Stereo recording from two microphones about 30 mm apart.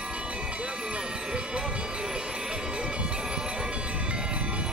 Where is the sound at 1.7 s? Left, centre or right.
Right.